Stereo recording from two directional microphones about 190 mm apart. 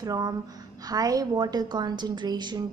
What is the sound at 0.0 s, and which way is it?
A woman's voice, 20° right (ahead or behind).